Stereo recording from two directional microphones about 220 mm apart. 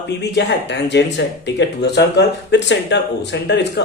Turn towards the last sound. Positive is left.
turn(degrees=50)  # may be behind; listen again after turning